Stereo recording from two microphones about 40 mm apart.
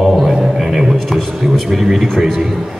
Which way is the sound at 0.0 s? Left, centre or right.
Centre.